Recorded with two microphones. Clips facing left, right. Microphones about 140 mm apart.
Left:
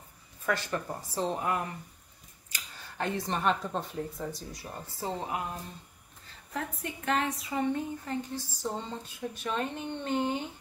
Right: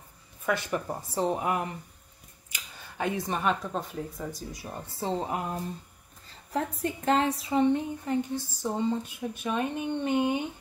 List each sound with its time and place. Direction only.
0.5 s speech: 15° right (ahead or behind)
2.5 s a sound: 10° right (ahead or behind)
3.3 s a woman's voice: 5° right (ahead or behind)
4.5 s speech: 20° right (ahead or behind)
6.5 s speech: 35° right (ahead or behind); by 10.4 s 15° right (ahead or behind)